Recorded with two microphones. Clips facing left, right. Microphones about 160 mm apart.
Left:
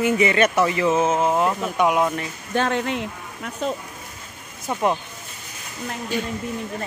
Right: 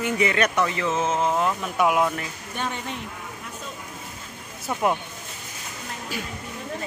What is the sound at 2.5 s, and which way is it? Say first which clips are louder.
Speech: left 9 dB; 90° left.